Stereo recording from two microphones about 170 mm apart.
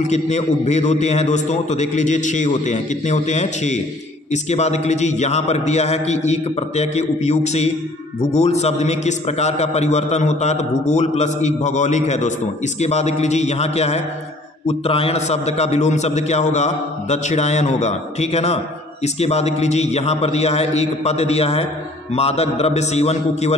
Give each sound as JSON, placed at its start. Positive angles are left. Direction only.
{"t": 0.0, "sound": "a man's voice", "side_deg": 40}